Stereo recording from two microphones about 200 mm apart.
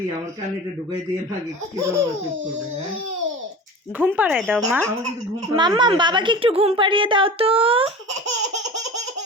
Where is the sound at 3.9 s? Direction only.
10° right (ahead or behind).